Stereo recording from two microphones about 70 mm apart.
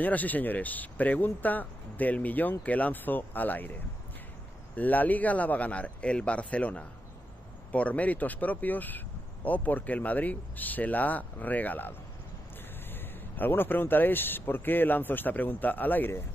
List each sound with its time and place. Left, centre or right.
0.0 s speech: left
4.7 s speech: left
12.9 s speech: left